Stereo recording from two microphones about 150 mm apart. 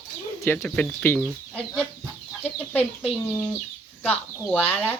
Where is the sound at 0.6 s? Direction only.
5° left (ahead or behind).